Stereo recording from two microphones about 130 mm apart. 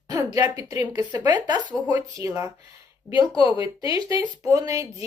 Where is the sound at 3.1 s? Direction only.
40° left (ahead or behind).